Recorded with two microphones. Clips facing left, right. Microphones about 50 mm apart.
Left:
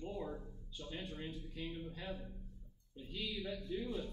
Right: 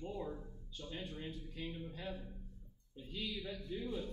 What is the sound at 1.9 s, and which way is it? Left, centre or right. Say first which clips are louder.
Speech: even; centre.